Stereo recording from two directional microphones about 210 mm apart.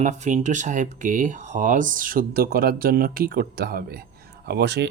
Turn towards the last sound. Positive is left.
turn(degrees=-55)  # may be behind; listen again after turning